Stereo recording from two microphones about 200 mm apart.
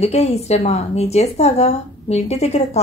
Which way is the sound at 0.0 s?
30° left (ahead or behind).